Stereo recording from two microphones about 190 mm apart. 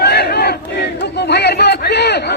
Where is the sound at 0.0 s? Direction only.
60° left (ahead or behind).